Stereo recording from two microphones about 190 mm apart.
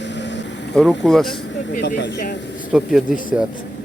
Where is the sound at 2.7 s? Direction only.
5° right (ahead or behind).